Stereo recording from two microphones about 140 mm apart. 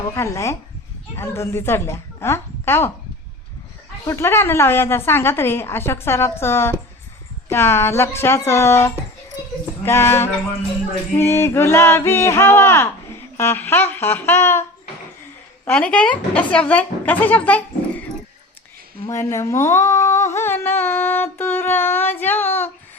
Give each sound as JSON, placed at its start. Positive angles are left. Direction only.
{"t": 0.1, "sound": "a sound", "side_deg": 20}
{"t": 1.1, "sound": "a woman's voice", "side_deg": 20}
{"t": 4.0, "sound": "speech", "side_deg": 20}
{"t": 9.8, "sound": "a sound", "side_deg": 20}
{"t": 11.2, "sound": "speech", "side_deg": 20}
{"t": 15.6, "sound": "speech", "side_deg": 10}
{"t": 19.0, "sound": "speech", "side_deg": 20}